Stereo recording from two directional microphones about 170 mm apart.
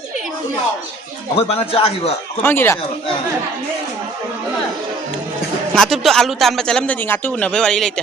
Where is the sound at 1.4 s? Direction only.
35° left (ahead or behind).